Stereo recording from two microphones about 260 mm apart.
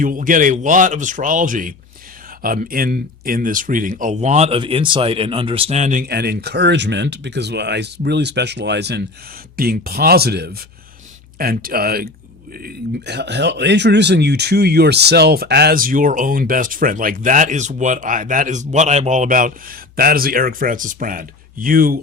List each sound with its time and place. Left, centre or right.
0.0 s speech: right